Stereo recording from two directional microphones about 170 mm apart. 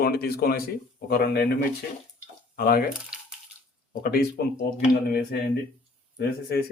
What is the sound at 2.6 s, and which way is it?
Speech, 60° left (ahead or behind).